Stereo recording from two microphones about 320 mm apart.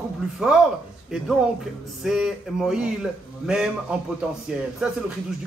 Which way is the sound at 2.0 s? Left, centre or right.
Centre.